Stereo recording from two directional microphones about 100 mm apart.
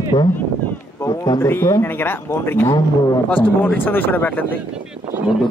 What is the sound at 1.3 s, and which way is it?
Speech, 25° left (ahead or behind).